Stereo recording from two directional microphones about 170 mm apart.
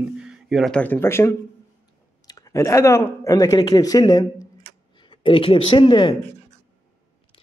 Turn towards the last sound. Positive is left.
turn(degrees=30)  # may be behind; listen again after turning